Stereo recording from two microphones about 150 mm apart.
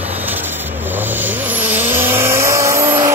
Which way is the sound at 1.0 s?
10° right (ahead or behind).